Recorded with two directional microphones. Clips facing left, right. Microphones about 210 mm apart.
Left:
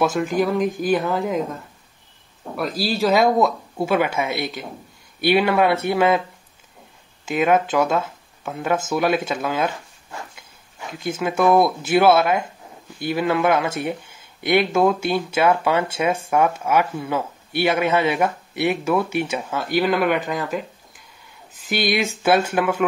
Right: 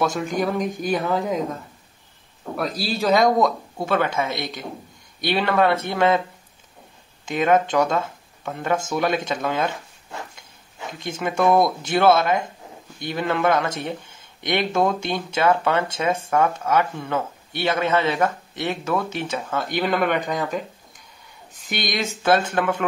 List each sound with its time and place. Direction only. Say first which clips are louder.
0.0 s speech: left 3 dB; centre (ahead or behind)
2.5 s speech: left 2 dB; centre (ahead or behind)
7.2 s speech: left 1 dB; 5° left (ahead or behind)
10.9 s speech: left 3 dB; 5° left (ahead or behind)
21.6 s speech: left 5 dB; 10° left (ahead or behind)